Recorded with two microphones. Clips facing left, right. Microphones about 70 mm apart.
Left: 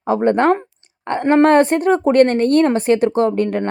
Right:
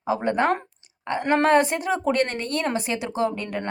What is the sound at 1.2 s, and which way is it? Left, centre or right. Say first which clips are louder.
Speech: left 7 dB; left.